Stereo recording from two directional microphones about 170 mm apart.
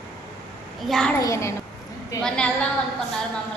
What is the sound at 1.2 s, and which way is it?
Speech, 15° left (ahead or behind).